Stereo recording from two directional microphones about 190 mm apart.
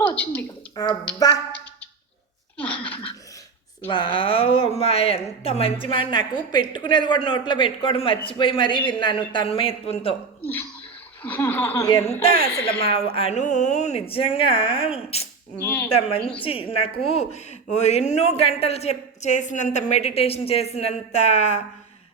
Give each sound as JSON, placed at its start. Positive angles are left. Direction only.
{"t": 0.0, "sound": "speech", "side_deg": 5}
{"t": 0.8, "sound": "a woman's voice", "side_deg": 20}
{"t": 2.6, "sound": "a sound", "side_deg": 10}
{"t": 3.8, "sound": "a woman's voice", "side_deg": 25}
{"t": 11.2, "sound": "speech", "side_deg": 10}
{"t": 12.0, "sound": "a woman's voice", "side_deg": 30}
{"t": 15.6, "sound": "speech", "side_deg": 5}
{"t": 15.9, "sound": "a woman's voice", "side_deg": 30}